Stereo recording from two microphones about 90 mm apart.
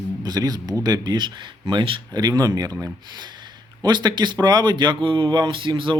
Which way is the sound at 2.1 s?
45° right (ahead or behind).